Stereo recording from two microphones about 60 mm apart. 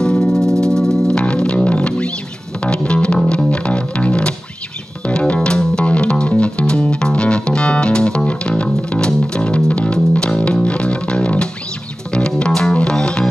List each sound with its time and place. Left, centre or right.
0.0 s music: centre